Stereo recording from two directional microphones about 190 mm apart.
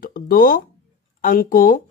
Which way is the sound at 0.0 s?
50° left (ahead or behind).